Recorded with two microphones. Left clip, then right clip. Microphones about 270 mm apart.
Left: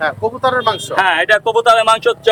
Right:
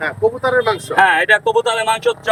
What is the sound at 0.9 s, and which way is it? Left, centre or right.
Speech, centre.